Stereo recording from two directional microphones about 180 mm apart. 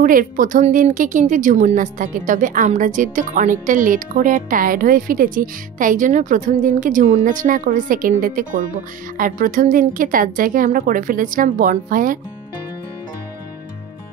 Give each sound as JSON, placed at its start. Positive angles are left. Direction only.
{"t": 0.0, "sound": "a woman's voice", "side_deg": -50}